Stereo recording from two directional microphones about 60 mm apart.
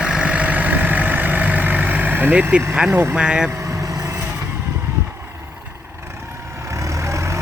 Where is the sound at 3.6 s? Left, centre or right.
Right.